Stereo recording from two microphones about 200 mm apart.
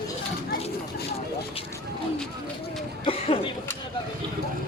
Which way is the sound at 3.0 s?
30° left (ahead or behind).